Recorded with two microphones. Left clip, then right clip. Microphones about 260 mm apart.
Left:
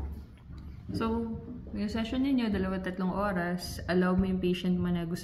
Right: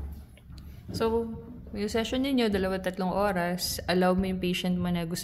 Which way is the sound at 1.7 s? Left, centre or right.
Right.